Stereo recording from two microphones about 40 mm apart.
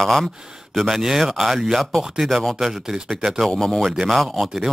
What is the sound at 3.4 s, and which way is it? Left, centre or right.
Speech, centre.